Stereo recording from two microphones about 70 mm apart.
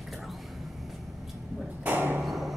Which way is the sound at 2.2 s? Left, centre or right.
Centre.